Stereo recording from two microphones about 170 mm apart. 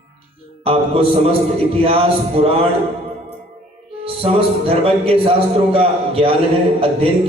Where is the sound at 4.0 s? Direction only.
35° right (ahead or behind).